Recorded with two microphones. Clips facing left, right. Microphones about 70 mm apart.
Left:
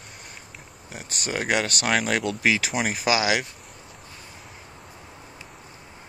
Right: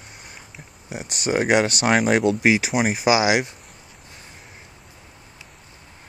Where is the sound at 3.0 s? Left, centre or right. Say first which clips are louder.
Right 4 dB; centre.